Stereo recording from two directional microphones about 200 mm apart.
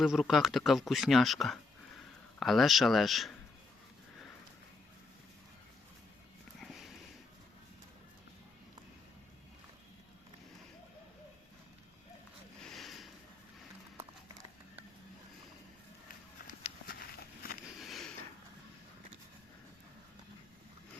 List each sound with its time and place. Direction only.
0.0 s speech: centre (ahead or behind)
6.6 s sniff: centre (ahead or behind)
12.6 s sniff: centre (ahead or behind)
16.8 s walk: 50° left (ahead or behind)
17.7 s sniff: centre (ahead or behind)